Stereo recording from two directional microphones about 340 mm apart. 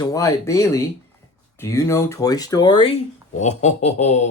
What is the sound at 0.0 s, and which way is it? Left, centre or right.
Speech, centre.